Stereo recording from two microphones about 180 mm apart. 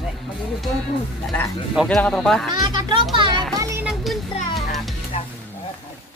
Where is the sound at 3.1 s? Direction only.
25° right (ahead or behind).